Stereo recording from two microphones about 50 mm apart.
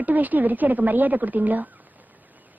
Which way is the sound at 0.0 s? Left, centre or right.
Right.